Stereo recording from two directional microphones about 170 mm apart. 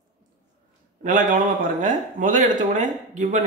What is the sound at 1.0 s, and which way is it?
Speech, 50° right (ahead or behind).